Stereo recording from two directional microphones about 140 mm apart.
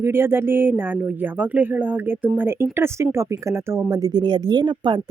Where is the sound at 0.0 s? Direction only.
15° right (ahead or behind).